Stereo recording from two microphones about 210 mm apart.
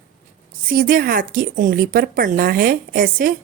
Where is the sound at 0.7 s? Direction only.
45° right (ahead or behind).